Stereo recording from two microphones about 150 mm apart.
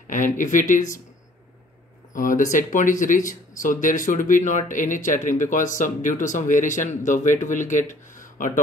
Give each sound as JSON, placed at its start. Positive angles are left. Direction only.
{"t": 0.4, "sound": "speech", "side_deg": 55}
{"t": 2.1, "sound": "speech", "side_deg": 60}